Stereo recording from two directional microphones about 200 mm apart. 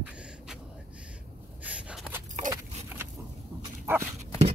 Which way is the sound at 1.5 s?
5° right (ahead or behind).